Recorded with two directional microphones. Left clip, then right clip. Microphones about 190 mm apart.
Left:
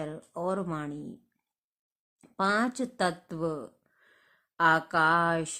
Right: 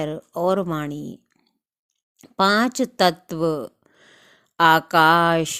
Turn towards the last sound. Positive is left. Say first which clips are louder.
# right 9 dB
turn(degrees=-40)  # may be behind; listen again after turning